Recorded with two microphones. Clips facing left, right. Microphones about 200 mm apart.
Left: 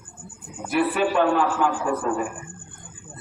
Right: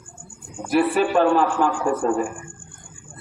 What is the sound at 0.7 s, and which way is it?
A man's voice, 35° right (ahead or behind).